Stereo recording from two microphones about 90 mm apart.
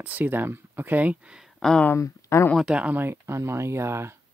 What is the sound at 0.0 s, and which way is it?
Speech, 20° right (ahead or behind).